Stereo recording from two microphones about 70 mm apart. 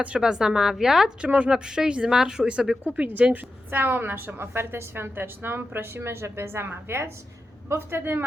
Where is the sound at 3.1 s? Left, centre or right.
Right.